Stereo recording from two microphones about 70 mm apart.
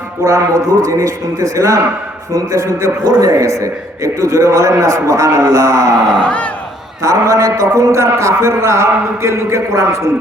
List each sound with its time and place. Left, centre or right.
0.3 s a man's voice: right
6.2 s speech: centre
7.0 s a man's voice: right